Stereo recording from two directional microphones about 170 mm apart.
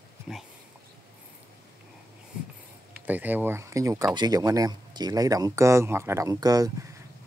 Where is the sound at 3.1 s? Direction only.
10° right (ahead or behind).